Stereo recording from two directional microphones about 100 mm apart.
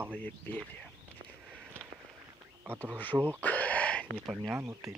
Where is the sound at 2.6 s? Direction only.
25° right (ahead or behind).